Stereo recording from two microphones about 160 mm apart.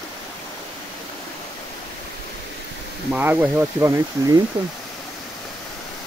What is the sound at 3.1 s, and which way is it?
Speech, 10° right (ahead or behind).